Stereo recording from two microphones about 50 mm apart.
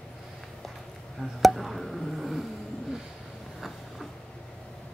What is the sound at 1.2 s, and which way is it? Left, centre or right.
Chop, centre.